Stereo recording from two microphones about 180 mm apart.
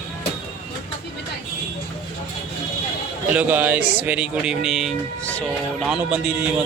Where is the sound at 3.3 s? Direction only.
10° right (ahead or behind).